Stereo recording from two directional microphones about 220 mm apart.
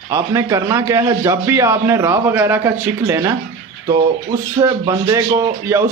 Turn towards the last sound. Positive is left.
turn(degrees=-15)  # may be behind; listen again after turning